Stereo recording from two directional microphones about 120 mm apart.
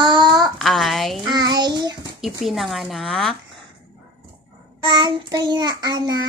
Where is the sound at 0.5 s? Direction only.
Centre (ahead or behind).